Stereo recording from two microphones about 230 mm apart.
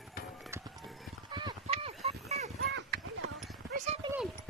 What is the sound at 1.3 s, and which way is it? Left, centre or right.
Clip-clop, right.